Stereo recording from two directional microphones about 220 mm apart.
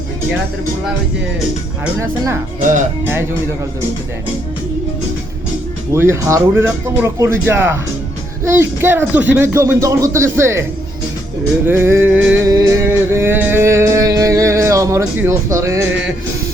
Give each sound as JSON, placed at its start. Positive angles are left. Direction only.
{"t": 1.8, "sound": "music", "side_deg": -15}
{"t": 2.6, "sound": "speech", "side_deg": -35}
{"t": 3.0, "sound": "music", "side_deg": -10}
{"t": 5.9, "sound": "music", "side_deg": -10}